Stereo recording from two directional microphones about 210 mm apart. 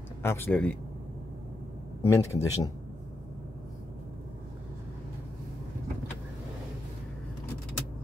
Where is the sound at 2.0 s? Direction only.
15° left (ahead or behind).